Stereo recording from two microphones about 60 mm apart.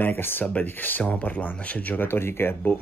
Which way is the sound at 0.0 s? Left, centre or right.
Left.